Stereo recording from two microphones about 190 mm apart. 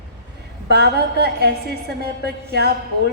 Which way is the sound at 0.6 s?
60° right (ahead or behind).